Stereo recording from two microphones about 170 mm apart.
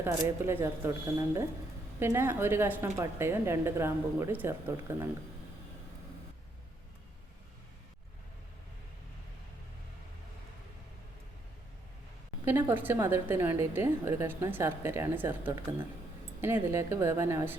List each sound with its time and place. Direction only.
0.0 s a woman's voice: 15° right (ahead or behind)
12.5 s a woman's voice: 10° right (ahead or behind)